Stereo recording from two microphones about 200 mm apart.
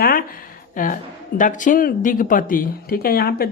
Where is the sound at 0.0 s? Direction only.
45° left (ahead or behind).